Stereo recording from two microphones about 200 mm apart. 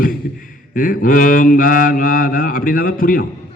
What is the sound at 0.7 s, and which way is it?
A man's voice, 45° left (ahead or behind).